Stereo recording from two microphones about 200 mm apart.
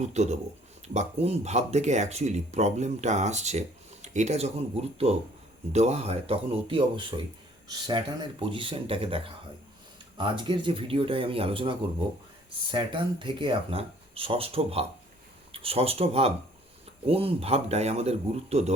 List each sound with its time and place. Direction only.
0.0 s speech: 35° right (ahead or behind)